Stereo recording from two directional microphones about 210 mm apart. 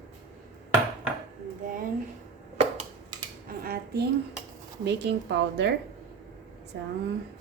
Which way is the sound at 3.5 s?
45° right (ahead or behind).